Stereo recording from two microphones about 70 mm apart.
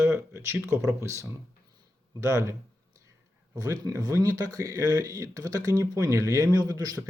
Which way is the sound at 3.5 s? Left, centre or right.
Right.